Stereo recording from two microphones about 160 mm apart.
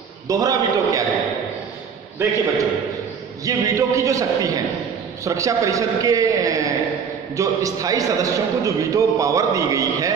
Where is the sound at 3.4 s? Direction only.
20° right (ahead or behind).